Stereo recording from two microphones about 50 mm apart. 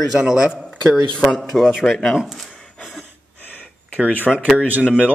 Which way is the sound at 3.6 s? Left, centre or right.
Left.